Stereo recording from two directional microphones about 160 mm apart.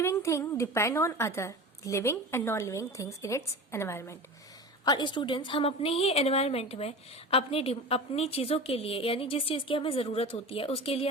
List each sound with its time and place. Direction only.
0.0 s a woman's voice: 15° left (ahead or behind)
4.9 s a woman's voice: 30° left (ahead or behind)